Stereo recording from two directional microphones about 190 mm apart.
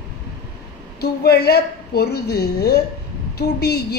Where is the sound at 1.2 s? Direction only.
60° left (ahead or behind).